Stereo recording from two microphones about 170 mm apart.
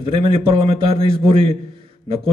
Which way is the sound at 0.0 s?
30° right (ahead or behind).